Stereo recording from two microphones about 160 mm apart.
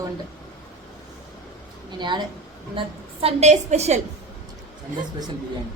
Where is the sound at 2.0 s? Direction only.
30° right (ahead or behind); by 4.0 s 45° right (ahead or behind).